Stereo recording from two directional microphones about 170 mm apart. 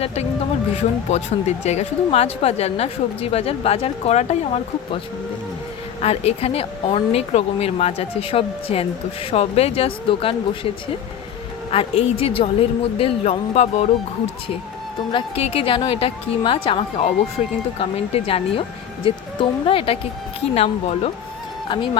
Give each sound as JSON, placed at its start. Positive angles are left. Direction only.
{"t": 0.8, "sound": "a woman's voice", "side_deg": 40}
{"t": 6.0, "sound": "a woman's voice", "side_deg": 35}
{"t": 11.7, "sound": "a woman's voice", "side_deg": 35}
{"t": 15.1, "sound": "a woman's voice", "side_deg": 35}